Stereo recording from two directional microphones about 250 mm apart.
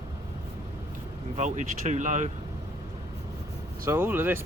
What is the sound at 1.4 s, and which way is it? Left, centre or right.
Speech, right.